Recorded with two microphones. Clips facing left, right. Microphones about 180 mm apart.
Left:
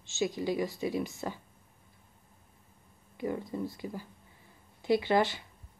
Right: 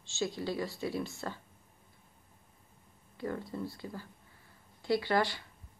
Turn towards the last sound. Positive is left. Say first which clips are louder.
# left 3 dB
turn(degrees=20)  # may be behind; listen again after turning